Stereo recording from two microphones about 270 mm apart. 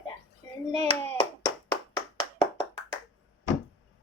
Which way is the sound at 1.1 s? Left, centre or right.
Centre.